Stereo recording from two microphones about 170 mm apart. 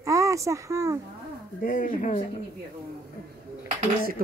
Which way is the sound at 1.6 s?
50° left (ahead or behind).